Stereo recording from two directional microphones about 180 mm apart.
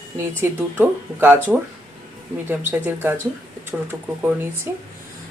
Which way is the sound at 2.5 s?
10° right (ahead or behind).